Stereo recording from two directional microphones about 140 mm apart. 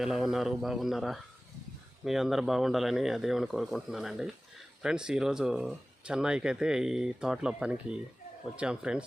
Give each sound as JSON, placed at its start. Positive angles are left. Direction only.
{"t": 0.0, "sound": "speech", "side_deg": 0}